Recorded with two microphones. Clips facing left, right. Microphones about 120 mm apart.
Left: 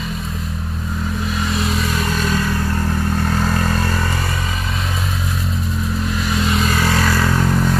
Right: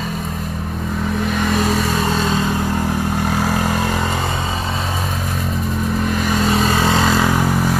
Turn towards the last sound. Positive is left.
turn(degrees=-5)  # may be behind; listen again after turning